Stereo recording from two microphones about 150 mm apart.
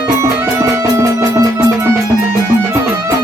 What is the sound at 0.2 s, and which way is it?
Music, 20° right (ahead or behind).